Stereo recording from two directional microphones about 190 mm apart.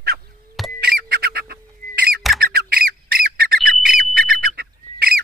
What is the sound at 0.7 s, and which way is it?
Bird, 55° right (ahead or behind).